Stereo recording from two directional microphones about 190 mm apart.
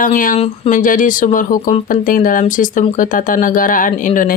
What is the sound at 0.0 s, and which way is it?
Speech, 45° left (ahead or behind).